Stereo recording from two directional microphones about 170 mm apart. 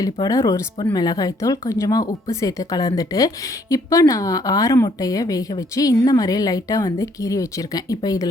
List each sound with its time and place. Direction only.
0.0 s speech: 20° left (ahead or behind)